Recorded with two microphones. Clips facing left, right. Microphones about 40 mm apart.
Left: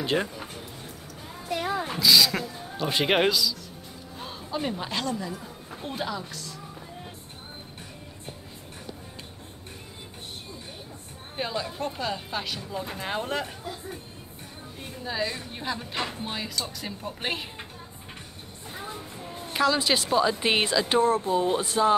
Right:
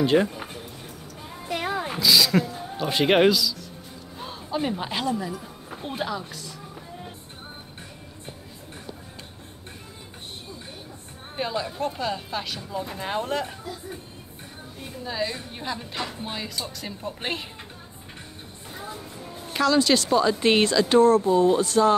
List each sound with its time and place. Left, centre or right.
0.0 s speech: centre
1.5 s roaring cats: right
1.9 s a man's voice: centre
11.3 s speech: centre
15.0 s speech: centre
18.8 s train: centre
19.5 s speech: centre